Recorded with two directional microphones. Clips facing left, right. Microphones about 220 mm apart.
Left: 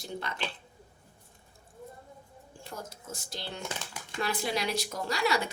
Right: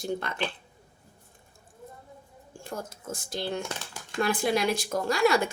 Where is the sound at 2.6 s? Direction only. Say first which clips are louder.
Right 6 dB; 50° right (ahead or behind).